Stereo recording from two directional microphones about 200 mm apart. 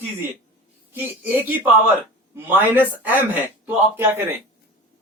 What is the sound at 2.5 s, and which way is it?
Speech, 10° right (ahead or behind).